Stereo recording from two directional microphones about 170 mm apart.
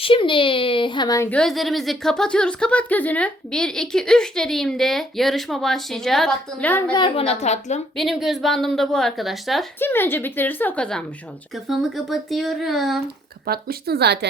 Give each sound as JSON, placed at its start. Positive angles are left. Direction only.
{"t": 0.0, "sound": "a child's voice", "side_deg": 30}
{"t": 1.3, "sound": "a woman's voice", "side_deg": 5}
{"t": 6.9, "sound": "a child's voice", "side_deg": 30}
{"t": 7.9, "sound": "a woman's voice", "side_deg": 0}
{"t": 9.7, "sound": "a woman's voice", "side_deg": 10}
{"t": 13.4, "sound": "speech", "side_deg": -65}